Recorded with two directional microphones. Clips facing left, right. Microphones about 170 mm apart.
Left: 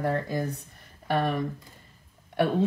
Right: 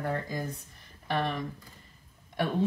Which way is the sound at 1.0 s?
50° left (ahead or behind).